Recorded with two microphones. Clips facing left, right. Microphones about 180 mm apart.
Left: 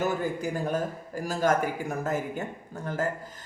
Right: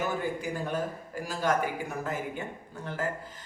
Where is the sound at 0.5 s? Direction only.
40° left (ahead or behind).